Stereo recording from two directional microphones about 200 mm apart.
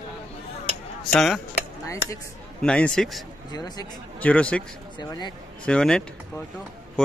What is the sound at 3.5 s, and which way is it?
Speech, 20° left (ahead or behind).